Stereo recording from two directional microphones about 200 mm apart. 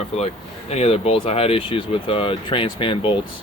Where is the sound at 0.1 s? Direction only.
30° left (ahead or behind).